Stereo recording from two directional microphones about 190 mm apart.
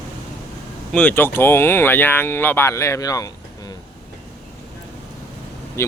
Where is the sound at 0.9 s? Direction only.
10° left (ahead or behind).